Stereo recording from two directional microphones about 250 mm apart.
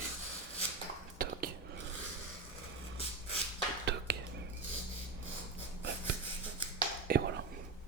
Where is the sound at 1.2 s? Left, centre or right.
Right.